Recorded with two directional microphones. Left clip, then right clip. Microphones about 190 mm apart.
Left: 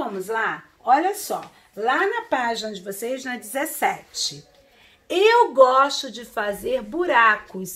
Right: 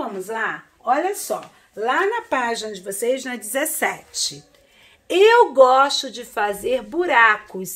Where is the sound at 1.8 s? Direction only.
30° right (ahead or behind).